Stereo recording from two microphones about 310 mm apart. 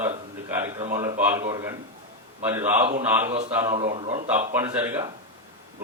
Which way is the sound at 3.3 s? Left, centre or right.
Centre.